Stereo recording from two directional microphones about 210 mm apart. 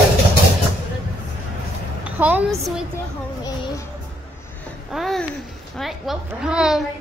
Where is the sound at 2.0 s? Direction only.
5° right (ahead or behind).